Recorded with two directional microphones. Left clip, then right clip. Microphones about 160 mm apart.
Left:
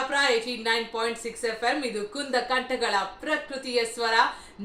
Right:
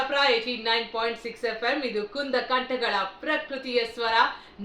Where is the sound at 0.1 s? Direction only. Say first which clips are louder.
Even; 25° left (ahead or behind).